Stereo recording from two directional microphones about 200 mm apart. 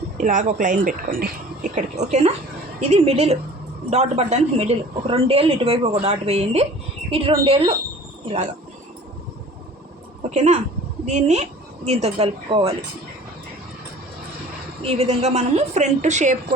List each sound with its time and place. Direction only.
0.2 s speech: 40° right (ahead or behind)
10.2 s a woman's voice: 35° right (ahead or behind)
14.8 s speech: 30° right (ahead or behind)